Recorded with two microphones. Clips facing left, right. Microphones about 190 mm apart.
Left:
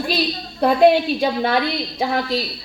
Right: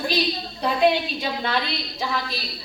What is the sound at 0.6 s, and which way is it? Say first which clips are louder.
A woman's voice: left 7 dB; 50° left (ahead or behind).